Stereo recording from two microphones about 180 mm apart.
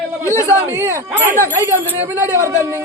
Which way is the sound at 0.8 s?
15° right (ahead or behind).